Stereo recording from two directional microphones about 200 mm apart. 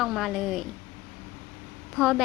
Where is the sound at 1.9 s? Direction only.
Centre (ahead or behind).